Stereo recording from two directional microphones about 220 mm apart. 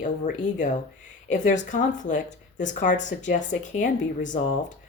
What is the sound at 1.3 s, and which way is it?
Speech, 35° left (ahead or behind).